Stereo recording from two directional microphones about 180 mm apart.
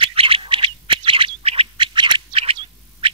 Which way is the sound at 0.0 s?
30° right (ahead or behind).